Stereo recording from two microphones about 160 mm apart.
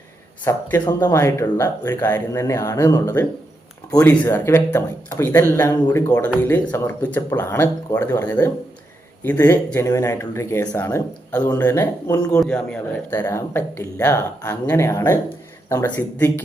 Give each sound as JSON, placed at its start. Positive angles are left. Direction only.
{"t": 0.4, "sound": "a man's voice", "side_deg": 15}
{"t": 12.4, "sound": "speech", "side_deg": 5}